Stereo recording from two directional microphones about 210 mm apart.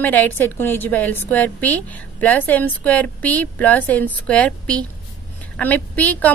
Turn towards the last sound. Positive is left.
turn(degrees=5)  # may be behind; listen again after turning